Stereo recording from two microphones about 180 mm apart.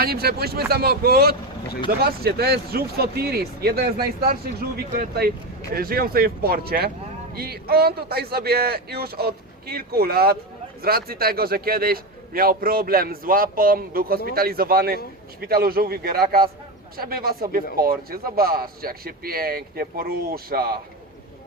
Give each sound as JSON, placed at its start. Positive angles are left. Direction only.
{"t": 0.0, "sound": "speech", "side_deg": -60}